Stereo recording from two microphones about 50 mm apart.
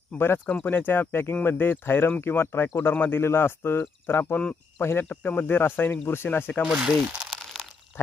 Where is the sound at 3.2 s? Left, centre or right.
Left.